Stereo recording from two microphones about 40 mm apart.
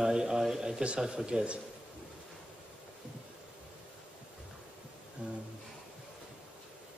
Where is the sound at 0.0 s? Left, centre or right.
Centre.